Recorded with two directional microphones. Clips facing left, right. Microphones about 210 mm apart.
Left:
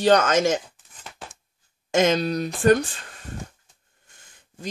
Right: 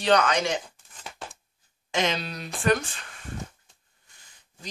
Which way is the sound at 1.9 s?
45° left (ahead or behind).